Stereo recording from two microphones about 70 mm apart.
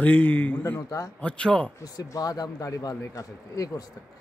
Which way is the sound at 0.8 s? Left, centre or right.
Left.